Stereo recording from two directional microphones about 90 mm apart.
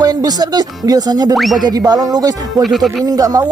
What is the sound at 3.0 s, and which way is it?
Speech, 45° right (ahead or behind).